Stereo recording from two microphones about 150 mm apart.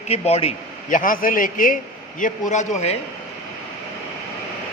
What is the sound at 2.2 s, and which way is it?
Speech, 55° left (ahead or behind).